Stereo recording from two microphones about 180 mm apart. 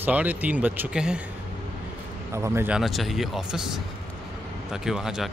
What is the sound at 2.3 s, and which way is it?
Speech, 15° right (ahead or behind).